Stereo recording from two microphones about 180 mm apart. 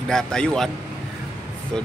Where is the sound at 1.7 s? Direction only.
5° left (ahead or behind).